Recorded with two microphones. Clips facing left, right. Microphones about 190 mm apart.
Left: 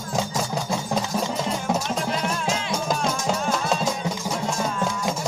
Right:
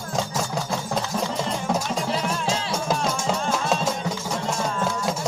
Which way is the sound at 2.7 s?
Centre (ahead or behind).